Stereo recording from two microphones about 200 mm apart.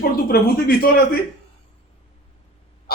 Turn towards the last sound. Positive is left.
turn(degrees=50)  # may be behind; listen again after turning